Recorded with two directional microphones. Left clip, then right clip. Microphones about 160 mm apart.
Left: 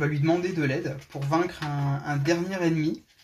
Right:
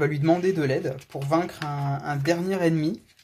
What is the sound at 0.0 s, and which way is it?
Speech, 55° right (ahead or behind).